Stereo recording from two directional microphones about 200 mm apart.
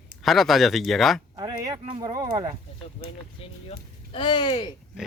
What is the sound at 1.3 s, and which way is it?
Speech, 20° right (ahead or behind).